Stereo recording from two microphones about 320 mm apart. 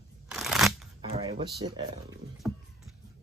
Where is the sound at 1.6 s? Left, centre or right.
Centre.